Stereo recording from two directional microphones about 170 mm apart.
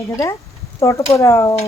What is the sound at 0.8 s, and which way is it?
Speech, 15° left (ahead or behind).